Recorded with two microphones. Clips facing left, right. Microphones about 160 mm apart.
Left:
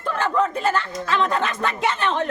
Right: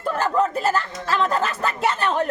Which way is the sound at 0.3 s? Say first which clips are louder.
Even; 5° right (ahead or behind).